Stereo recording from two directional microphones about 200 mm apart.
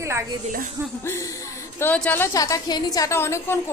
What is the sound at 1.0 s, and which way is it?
A woman's voice, 15° left (ahead or behind).